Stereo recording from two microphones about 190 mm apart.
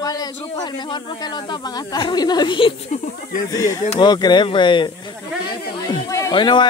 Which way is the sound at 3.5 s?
20° left (ahead or behind).